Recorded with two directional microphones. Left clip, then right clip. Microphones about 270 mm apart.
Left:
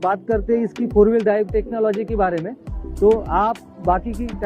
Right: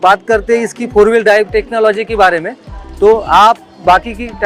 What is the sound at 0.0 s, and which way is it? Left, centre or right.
Speech, centre.